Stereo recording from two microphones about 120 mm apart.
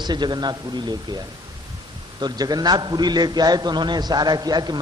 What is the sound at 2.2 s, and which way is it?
A man's voice, 35° right (ahead or behind).